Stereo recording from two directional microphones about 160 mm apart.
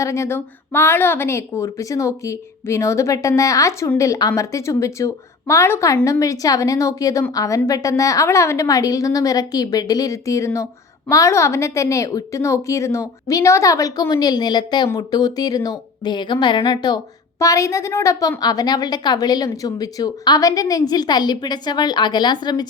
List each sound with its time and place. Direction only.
0.0 s a woman's voice: 20° left (ahead or behind)